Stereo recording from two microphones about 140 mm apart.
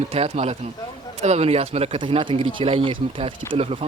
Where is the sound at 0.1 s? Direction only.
50° right (ahead or behind).